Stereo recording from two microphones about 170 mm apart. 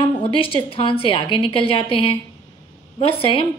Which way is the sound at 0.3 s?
30° left (ahead or behind).